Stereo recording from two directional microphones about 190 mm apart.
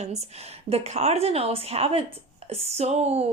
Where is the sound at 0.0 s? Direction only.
35° right (ahead or behind).